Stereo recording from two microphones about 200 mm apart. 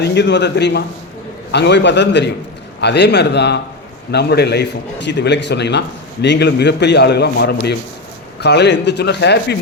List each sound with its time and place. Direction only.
0.0 s a man's voice: 60° left (ahead or behind)